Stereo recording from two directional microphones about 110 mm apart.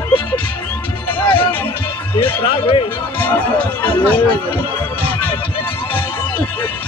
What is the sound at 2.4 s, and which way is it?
Speech, 55° left (ahead or behind).